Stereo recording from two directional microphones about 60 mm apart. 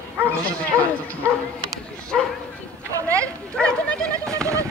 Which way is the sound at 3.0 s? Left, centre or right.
Right.